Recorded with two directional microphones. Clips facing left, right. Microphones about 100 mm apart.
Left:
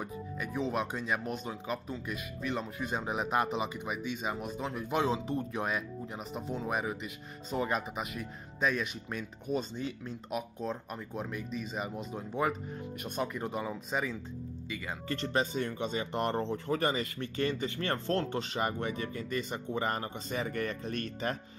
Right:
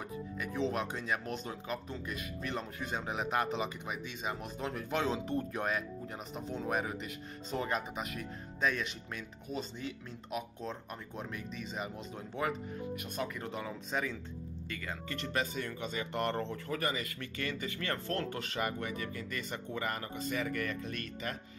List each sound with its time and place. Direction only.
0.0 s music: 15° left (ahead or behind)
1.0 s speech: 20° left (ahead or behind)
3.1 s speech: 20° left (ahead or behind)
10.6 s speech: 10° left (ahead or behind)
13.0 s speech: 20° left (ahead or behind)
15.0 s speech: 30° left (ahead or behind)